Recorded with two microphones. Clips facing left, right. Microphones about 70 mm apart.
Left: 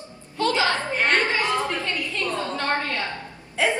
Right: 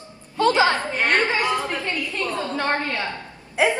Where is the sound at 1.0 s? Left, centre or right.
Right.